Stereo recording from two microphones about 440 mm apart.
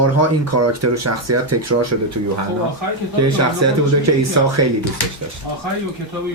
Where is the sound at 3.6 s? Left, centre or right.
Right.